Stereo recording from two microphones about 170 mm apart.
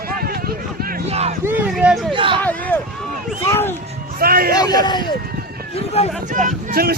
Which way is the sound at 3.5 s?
15° left (ahead or behind).